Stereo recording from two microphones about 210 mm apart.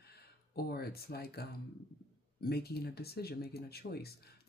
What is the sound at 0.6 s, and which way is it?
Speech, 45° left (ahead or behind).